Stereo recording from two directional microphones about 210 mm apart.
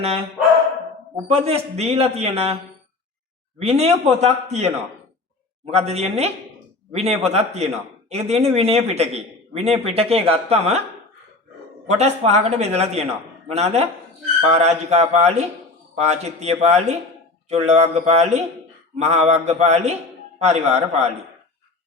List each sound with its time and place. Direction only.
1.1 s speech: 30° right (ahead or behind)
3.6 s speech: 30° right (ahead or behind)
5.7 s speech: 30° right (ahead or behind)
11.9 s speech: 30° right (ahead or behind)